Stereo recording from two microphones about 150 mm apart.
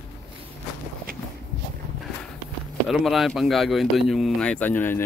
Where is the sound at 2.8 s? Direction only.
Centre (ahead or behind).